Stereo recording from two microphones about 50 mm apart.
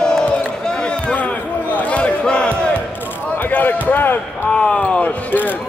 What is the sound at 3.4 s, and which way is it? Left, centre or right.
Speech, left.